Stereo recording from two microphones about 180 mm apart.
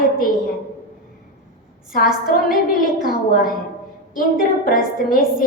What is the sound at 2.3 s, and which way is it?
A woman's voice, 50° left (ahead or behind).